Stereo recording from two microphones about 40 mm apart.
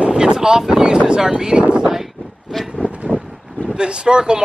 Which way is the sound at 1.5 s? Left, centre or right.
Right.